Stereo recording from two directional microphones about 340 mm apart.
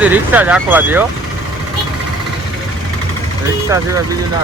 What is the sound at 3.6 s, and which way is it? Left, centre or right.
Speech, centre.